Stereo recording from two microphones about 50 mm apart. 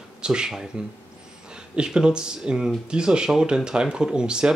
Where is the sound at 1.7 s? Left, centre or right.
Centre.